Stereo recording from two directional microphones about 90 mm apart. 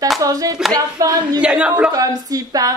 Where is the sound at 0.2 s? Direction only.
45° right (ahead or behind).